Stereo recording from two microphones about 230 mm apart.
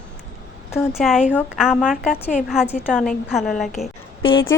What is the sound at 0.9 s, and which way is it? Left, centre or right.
A woman's voice, centre.